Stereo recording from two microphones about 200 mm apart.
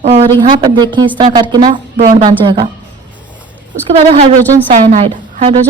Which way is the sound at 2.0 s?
35° right (ahead or behind).